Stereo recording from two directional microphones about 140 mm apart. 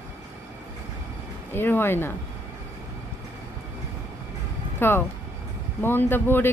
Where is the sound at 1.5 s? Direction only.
15° left (ahead or behind).